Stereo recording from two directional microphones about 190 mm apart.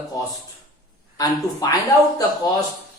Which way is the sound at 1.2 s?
20° left (ahead or behind).